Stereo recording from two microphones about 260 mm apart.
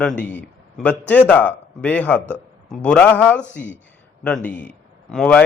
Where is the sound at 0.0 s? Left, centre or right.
Centre.